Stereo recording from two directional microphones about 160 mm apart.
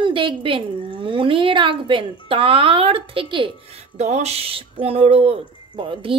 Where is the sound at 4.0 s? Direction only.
45° right (ahead or behind).